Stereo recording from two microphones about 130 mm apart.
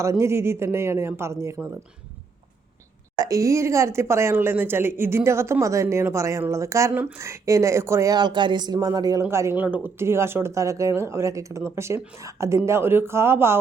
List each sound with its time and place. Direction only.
0.0 s speech: 20° right (ahead or behind)
3.2 s speech: 25° right (ahead or behind)